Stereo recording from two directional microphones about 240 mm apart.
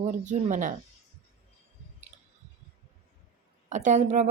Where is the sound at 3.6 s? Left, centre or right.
Right.